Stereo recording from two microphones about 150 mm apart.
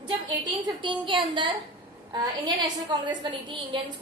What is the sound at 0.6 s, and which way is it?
A woman's voice, 35° right (ahead or behind).